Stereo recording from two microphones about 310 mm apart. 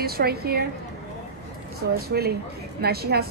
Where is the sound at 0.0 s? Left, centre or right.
Right.